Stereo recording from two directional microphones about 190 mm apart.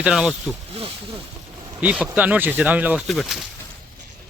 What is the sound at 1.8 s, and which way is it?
Speech, 10° right (ahead or behind).